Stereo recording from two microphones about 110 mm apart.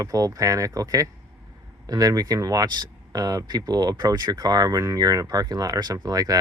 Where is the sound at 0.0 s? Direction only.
30° right (ahead or behind).